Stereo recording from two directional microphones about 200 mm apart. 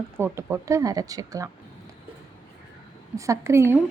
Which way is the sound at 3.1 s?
15° right (ahead or behind).